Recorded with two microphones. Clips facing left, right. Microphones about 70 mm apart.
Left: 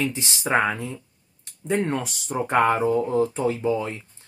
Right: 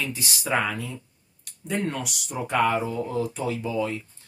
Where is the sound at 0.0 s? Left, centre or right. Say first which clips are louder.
Left 4 dB; left.